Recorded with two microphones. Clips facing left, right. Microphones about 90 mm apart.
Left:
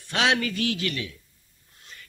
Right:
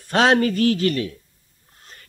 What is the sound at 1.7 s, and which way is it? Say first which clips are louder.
Wheeze: right 1 dB; 40° right (ahead or behind).